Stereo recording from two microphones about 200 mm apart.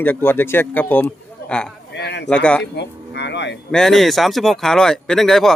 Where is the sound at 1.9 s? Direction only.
60° left (ahead or behind).